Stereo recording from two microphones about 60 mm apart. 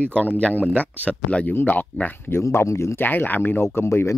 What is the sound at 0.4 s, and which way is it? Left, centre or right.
Speech, left.